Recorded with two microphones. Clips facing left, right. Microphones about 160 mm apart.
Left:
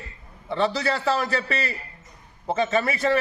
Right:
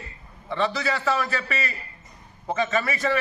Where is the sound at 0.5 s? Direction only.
30° left (ahead or behind).